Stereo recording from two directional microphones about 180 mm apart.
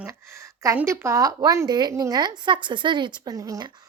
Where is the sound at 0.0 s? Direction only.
15° right (ahead or behind).